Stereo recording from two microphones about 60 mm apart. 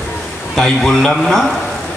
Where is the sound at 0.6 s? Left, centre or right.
Centre.